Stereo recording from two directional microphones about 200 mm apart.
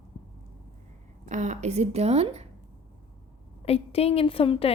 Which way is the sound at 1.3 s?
35° right (ahead or behind).